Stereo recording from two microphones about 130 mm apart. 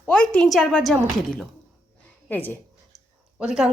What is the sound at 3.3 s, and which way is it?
Speech, 5° right (ahead or behind).